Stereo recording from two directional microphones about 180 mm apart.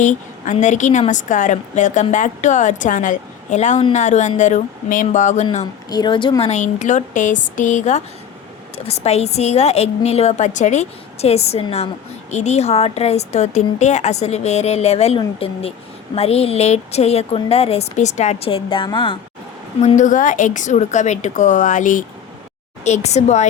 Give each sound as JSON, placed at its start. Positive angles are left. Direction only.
{"t": 0.0, "sound": "a woman's voice", "side_deg": 45}
{"t": 5.9, "sound": "a woman's voice", "side_deg": 25}
{"t": 6.5, "sound": "a woman's voice", "side_deg": 40}
{"t": 19.8, "sound": "a woman's voice", "side_deg": 40}